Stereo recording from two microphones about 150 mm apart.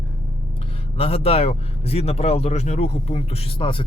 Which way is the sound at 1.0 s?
40° left (ahead or behind).